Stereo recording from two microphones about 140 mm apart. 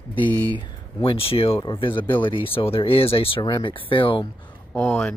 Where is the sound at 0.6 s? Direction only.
40° left (ahead or behind).